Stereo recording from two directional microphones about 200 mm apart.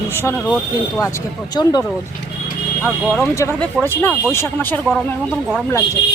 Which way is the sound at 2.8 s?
Centre (ahead or behind).